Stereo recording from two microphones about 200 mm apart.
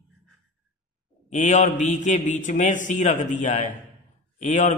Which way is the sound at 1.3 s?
35° left (ahead or behind).